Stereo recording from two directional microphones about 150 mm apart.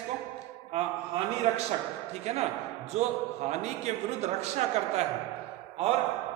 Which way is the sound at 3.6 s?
50° right (ahead or behind).